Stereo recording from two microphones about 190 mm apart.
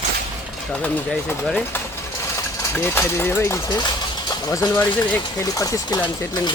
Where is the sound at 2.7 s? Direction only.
10° left (ahead or behind).